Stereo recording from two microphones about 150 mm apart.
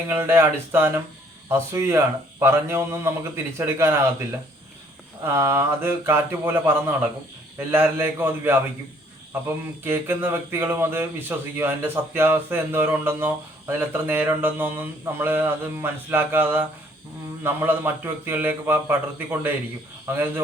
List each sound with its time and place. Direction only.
0.1 s speech: 15° right (ahead or behind)
9.8 s speech: 15° right (ahead or behind)